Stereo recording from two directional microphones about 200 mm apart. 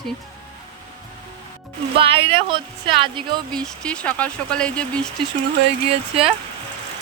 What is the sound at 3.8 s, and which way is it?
Speech, 5° left (ahead or behind).